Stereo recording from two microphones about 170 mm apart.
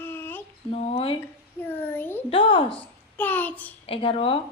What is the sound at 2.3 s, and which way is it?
Speech, 30° left (ahead or behind).